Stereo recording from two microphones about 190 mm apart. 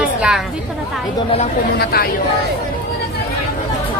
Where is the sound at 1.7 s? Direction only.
55° left (ahead or behind).